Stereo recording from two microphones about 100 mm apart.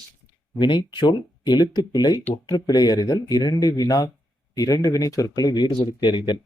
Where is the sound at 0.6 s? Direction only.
50° left (ahead or behind).